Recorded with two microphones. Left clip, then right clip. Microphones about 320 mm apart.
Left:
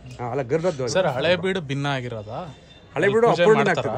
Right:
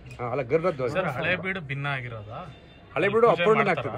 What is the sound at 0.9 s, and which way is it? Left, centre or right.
Speech, centre.